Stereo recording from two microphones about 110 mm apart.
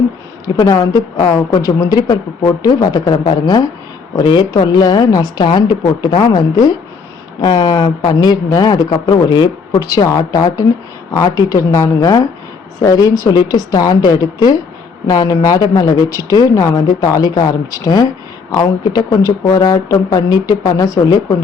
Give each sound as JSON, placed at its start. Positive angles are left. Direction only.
{"t": 0.4, "sound": "a woman's voice", "side_deg": 35}
{"t": 9.8, "sound": "a woman's voice", "side_deg": 35}